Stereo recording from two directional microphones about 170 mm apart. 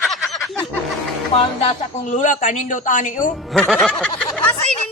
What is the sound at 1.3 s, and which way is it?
Speech, 40° left (ahead or behind).